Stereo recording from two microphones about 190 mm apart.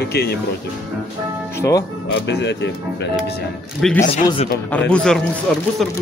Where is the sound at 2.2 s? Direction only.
65° left (ahead or behind).